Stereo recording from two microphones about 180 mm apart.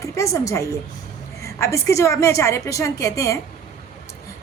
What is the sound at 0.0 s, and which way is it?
A woman's voice, 15° left (ahead or behind).